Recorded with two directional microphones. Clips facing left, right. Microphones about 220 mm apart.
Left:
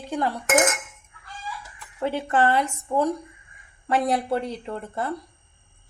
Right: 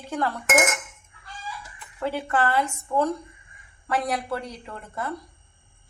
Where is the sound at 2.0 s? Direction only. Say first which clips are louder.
Left 3 dB; 20° left (ahead or behind).